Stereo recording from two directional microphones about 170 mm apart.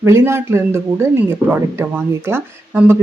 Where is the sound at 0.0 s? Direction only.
15° right (ahead or behind).